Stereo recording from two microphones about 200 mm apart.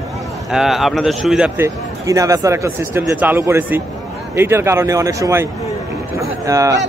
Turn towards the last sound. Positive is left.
turn(degrees=-15)  # may be behind; listen again after turning